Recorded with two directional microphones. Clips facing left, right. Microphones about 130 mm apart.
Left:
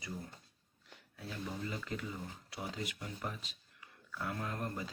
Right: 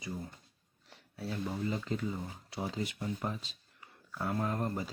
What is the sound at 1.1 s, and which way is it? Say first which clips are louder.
Speech: right 6 dB; 35° right (ahead or behind).